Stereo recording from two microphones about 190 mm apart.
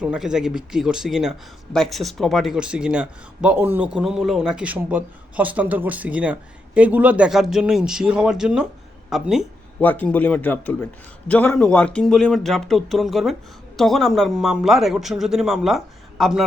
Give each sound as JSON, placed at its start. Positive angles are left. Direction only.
{"t": 0.0, "sound": "a man's voice", "side_deg": -5}